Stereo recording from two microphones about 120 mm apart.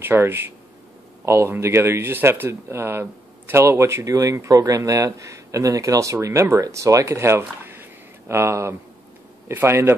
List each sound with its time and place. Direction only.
0.0 s speech: 20° right (ahead or behind)